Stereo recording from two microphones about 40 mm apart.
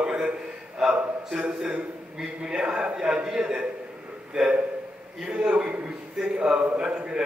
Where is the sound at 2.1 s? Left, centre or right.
Centre.